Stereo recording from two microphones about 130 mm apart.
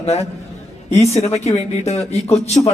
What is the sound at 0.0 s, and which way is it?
A man's voice, 55° left (ahead or behind).